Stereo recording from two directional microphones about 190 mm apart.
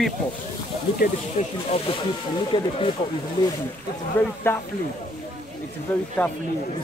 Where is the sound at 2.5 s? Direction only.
25° left (ahead or behind).